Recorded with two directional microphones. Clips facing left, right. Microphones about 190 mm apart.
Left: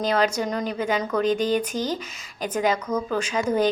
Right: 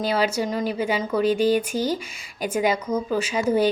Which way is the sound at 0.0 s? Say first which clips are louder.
Even; 5° right (ahead or behind).